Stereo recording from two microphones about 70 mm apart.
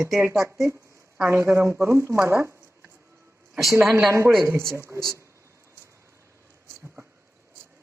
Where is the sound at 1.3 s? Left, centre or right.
Right.